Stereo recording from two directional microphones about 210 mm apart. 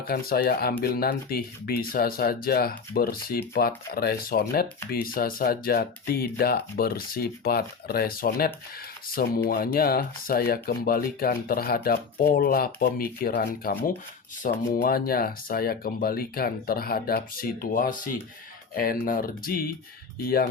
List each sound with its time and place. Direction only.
0.0 s speech: 45° left (ahead or behind)